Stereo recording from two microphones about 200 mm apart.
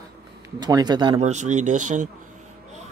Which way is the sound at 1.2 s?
35° right (ahead or behind).